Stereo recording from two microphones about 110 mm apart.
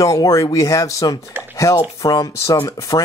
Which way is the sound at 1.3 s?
20° right (ahead or behind).